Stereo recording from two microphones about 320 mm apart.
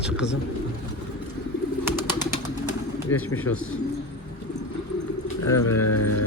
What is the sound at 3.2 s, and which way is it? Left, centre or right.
Speech, left.